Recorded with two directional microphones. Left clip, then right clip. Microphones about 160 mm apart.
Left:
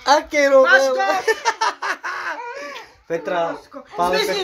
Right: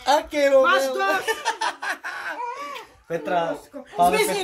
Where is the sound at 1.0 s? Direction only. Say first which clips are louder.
Left 4 dB; 35° left (ahead or behind).